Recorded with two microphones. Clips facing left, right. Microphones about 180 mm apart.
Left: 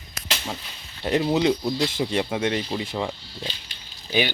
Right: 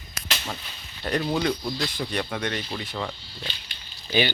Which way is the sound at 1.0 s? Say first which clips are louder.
Left 4 dB; 20° left (ahead or behind).